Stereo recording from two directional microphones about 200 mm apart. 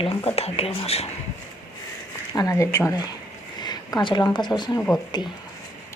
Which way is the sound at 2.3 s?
15° left (ahead or behind).